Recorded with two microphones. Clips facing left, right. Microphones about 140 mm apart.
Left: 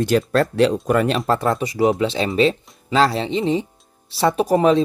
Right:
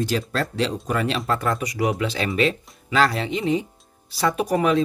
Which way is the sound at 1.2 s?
30° left (ahead or behind).